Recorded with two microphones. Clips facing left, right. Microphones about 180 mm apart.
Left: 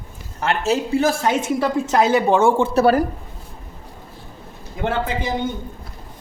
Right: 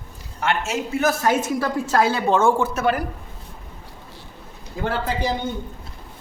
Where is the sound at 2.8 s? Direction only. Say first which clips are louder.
Left 7 dB; 35° left (ahead or behind).